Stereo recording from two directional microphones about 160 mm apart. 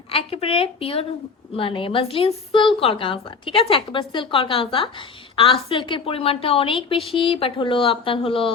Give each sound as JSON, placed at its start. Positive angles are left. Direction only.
{"t": 0.1, "sound": "a woman's voice", "side_deg": 35}